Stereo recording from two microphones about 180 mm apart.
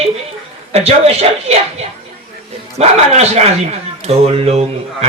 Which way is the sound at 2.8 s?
35° right (ahead or behind).